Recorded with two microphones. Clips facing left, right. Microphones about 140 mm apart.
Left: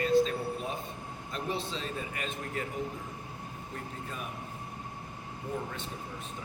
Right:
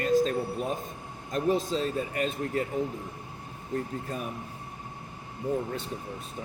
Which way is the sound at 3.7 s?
40° right (ahead or behind).